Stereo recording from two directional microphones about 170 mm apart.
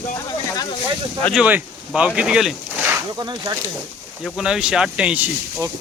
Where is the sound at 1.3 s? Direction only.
5° right (ahead or behind).